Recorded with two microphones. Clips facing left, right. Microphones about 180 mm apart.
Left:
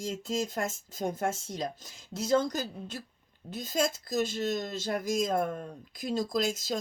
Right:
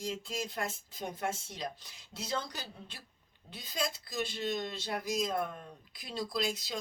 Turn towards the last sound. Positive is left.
turn(degrees=45)  # may be behind; listen again after turning